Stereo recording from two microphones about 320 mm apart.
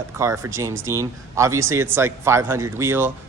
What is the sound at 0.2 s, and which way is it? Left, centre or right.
A man's voice, centre.